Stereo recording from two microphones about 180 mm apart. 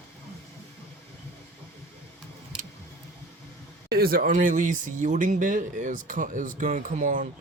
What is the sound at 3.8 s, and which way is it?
Speech, 55° right (ahead or behind).